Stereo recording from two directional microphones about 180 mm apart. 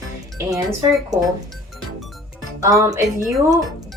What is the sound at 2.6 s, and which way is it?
Speech, 20° right (ahead or behind).